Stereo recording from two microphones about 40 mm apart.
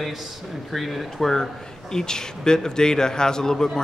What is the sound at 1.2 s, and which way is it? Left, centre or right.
A man's voice, centre.